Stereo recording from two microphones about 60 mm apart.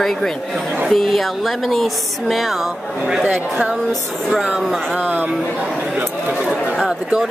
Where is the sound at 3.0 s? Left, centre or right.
Centre.